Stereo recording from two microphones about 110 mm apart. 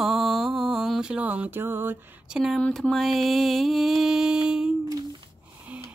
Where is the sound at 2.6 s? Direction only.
5° left (ahead or behind).